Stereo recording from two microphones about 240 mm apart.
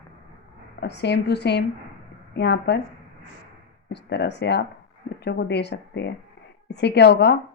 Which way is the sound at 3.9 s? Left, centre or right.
Left.